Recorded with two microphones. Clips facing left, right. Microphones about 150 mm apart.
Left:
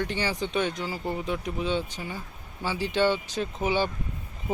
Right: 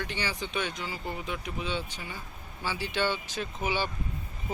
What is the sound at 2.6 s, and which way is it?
Speech, 30° left (ahead or behind).